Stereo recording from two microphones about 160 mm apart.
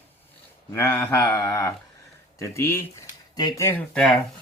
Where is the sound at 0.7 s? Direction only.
15° left (ahead or behind).